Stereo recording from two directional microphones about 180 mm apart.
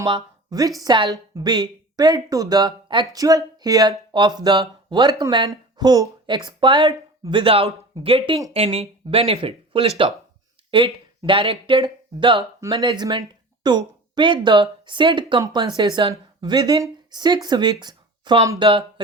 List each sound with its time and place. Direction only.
0.0 s a woman's voice: 20° right (ahead or behind)